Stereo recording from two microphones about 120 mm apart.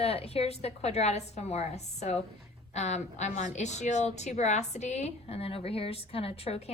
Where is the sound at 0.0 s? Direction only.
55° left (ahead or behind).